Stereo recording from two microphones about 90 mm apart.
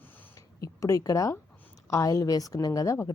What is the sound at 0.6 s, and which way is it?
A woman's voice, 40° left (ahead or behind).